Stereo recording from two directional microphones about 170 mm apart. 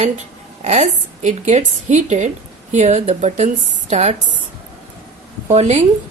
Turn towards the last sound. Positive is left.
turn(degrees=-40)  # may be behind; listen again after turning